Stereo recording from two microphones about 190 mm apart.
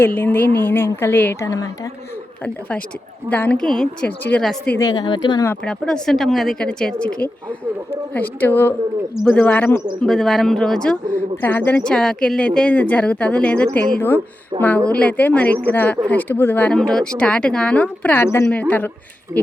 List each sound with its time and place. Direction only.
0.0 s speech: 10° left (ahead or behind)
2.4 s speech: 5° left (ahead or behind)
4.9 s speech: 25° left (ahead or behind)
5.6 s speech: 5° left (ahead or behind)
14.5 s a woman's voice: 25° right (ahead or behind)
14.8 s speech: 5° left (ahead or behind)